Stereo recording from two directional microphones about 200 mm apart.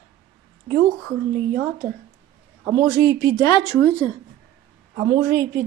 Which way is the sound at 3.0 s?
55° right (ahead or behind).